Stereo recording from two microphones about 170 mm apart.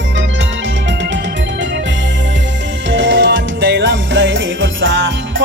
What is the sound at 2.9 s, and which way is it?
Music, 90° right.